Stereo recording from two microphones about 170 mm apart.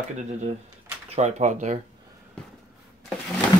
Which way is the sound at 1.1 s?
45° right (ahead or behind).